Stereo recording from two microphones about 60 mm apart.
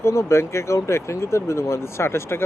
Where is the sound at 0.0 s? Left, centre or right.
Left.